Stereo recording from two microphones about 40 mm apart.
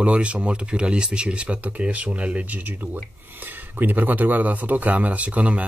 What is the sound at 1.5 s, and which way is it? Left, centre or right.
A man's voice, right.